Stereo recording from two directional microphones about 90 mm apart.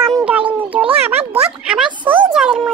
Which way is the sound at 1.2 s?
90° right.